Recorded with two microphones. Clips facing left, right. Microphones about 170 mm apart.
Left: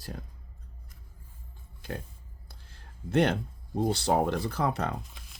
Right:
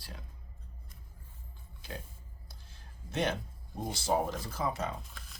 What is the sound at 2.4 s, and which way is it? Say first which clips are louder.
Speech: left 4 dB; 60° left (ahead or behind).